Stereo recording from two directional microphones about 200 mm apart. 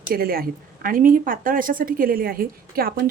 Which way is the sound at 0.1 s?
50° right (ahead or behind).